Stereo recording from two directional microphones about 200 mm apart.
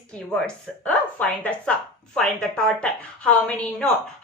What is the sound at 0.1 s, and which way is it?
A woman's voice, 5° left (ahead or behind).